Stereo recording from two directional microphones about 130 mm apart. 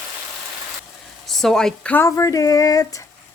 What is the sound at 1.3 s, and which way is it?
Speech, 5° left (ahead or behind).